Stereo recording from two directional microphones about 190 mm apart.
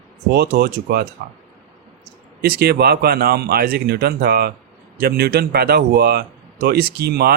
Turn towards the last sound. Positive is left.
turn(degrees=-55)  # may be behind; listen again after turning